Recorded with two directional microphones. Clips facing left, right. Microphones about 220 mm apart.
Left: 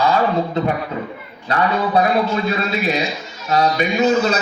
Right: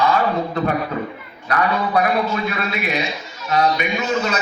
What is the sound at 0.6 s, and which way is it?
A man's voice, 25° left (ahead or behind).